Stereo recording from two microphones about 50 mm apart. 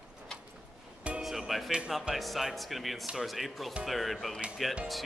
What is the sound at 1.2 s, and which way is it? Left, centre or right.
Music, centre.